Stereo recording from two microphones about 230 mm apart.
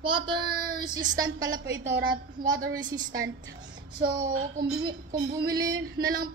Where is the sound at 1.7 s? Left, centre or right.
Right.